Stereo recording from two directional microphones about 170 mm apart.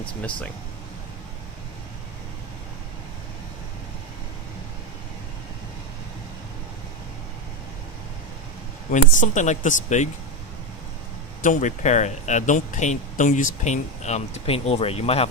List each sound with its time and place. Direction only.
8.9 s speech: 45° left (ahead or behind)
11.4 s speech: 45° left (ahead or behind)